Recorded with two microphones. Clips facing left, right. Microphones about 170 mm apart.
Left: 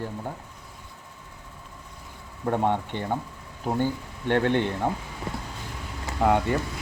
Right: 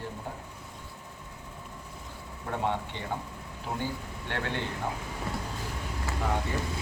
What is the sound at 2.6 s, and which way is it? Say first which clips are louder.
Speech: left 6 dB; 55° left (ahead or behind).